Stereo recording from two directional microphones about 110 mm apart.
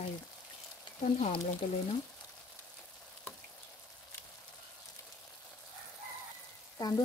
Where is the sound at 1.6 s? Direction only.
75° left (ahead or behind).